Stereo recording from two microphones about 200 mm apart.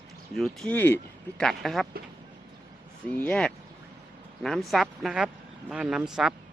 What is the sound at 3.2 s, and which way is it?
Speech, 5° left (ahead or behind).